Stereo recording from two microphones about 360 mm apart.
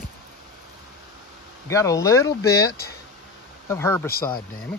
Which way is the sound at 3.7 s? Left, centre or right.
Centre.